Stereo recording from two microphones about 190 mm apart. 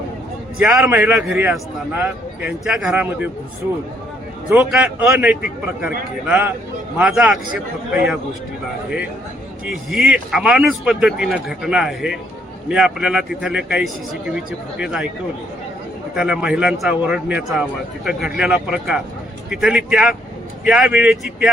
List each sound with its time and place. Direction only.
0.6 s a man's voice: 5° right (ahead or behind)
4.4 s a man's voice: 5° right (ahead or behind)
9.6 s speech: 5° right (ahead or behind)
16.1 s speech: 5° right (ahead or behind)